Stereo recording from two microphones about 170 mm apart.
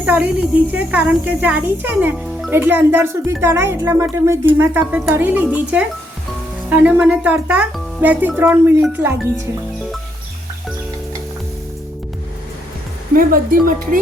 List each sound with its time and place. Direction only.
0.0 s a sound: 10° right (ahead or behind)
0.7 s a child's voice: 10° right (ahead or behind)
13.1 s speech: 55° right (ahead or behind)